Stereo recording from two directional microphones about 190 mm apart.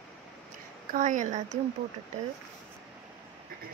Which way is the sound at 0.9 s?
45° right (ahead or behind).